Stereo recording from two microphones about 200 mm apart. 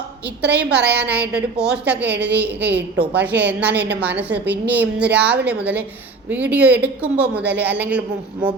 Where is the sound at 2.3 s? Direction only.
60° right (ahead or behind).